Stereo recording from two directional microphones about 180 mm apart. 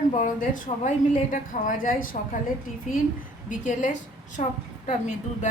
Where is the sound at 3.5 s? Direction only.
45° left (ahead or behind).